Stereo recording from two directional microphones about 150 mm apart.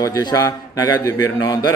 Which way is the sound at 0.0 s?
25° left (ahead or behind).